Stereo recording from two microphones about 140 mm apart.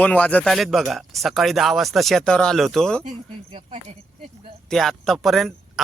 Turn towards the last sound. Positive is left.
turn(degrees=0)  # may be behind; listen again after turning